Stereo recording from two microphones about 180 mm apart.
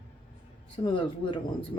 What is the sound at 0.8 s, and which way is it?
Speech, 30° left (ahead or behind).